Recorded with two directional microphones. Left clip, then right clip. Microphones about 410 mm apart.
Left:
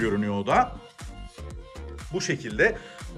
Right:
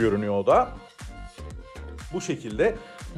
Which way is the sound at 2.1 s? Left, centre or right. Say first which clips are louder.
Left 2 dB; centre.